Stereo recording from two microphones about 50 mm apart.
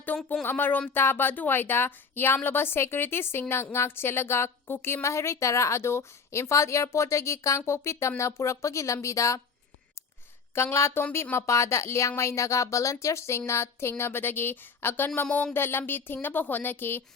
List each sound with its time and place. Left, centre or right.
0.4 s a woman's voice: left
5.0 s speech: left
6.8 s speech: left
10.5 s a woman's voice: left
11.3 s speech: left